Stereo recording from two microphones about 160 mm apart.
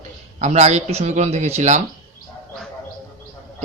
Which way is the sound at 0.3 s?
45° right (ahead or behind).